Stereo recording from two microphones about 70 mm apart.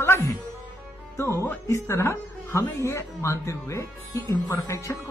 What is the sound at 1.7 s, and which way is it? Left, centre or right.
Speech, left.